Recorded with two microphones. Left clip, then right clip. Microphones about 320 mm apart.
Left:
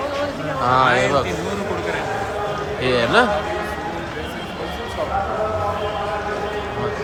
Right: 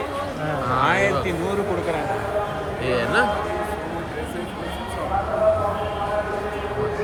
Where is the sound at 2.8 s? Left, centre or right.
Centre.